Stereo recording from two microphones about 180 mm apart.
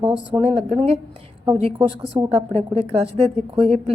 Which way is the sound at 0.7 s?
35° right (ahead or behind).